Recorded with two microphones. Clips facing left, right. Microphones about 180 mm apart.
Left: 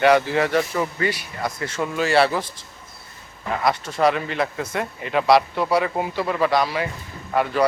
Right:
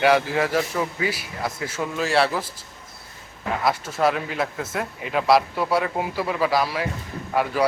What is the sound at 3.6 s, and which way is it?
Speech, 5° right (ahead or behind).